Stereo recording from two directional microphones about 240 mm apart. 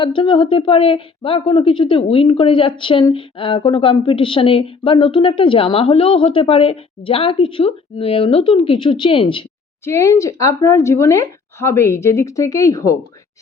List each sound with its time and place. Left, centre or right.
0.0 s a woman's voice: left
9.8 s speech: centre